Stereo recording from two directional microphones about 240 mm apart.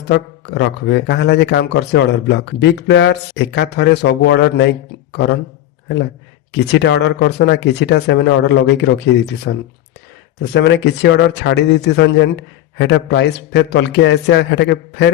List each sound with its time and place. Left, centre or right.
0.1 s a man's voice: left
6.5 s a man's voice: left